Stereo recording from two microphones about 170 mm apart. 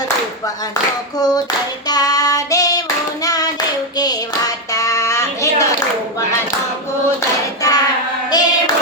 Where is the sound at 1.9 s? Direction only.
20° left (ahead or behind).